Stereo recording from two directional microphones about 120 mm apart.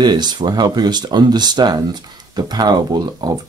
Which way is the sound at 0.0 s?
35° right (ahead or behind).